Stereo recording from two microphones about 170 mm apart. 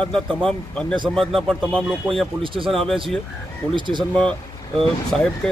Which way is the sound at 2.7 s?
Centre (ahead or behind).